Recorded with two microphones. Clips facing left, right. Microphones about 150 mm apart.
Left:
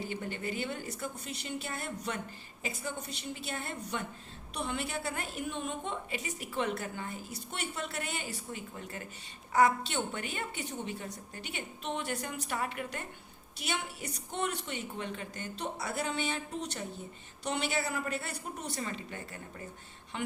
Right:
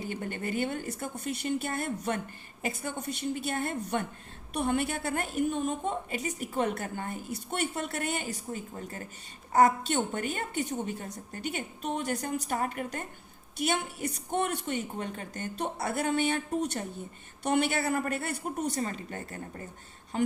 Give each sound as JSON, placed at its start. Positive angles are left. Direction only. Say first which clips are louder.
{"t": 0.1, "sound": "a woman's voice", "louder": "right 3 dB", "side_deg": -50}